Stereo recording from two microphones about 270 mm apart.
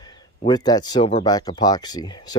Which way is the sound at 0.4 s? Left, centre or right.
Centre.